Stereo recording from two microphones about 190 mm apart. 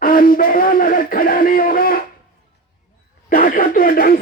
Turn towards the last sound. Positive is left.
turn(degrees=50)  # may be behind; listen again after turning